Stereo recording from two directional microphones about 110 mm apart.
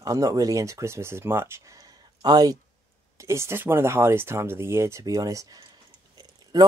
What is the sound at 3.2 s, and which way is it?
Speech, 25° right (ahead or behind).